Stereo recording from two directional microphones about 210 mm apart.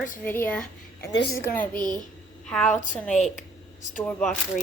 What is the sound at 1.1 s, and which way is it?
Speech, 55° left (ahead or behind).